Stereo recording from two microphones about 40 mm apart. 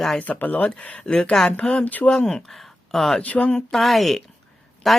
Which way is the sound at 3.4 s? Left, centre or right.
Left.